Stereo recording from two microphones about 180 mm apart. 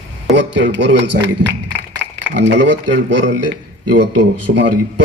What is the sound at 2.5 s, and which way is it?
A man's voice, 80° right.